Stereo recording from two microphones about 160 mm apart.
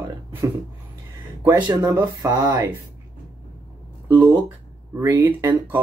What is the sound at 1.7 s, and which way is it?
Speech, 15° right (ahead or behind).